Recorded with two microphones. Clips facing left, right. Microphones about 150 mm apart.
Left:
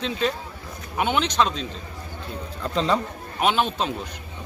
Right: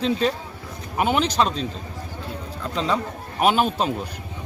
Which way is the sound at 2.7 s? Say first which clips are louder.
Left 1 dB; 10° right (ahead or behind).